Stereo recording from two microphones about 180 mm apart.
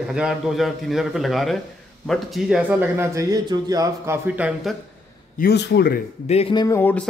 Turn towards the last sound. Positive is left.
turn(degrees=10)  # may be behind; listen again after turning